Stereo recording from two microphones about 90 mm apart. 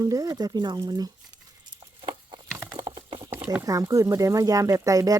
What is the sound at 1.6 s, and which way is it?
Patter, 60° right (ahead or behind).